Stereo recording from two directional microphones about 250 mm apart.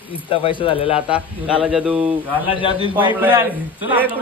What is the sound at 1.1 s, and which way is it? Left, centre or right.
Speech, centre.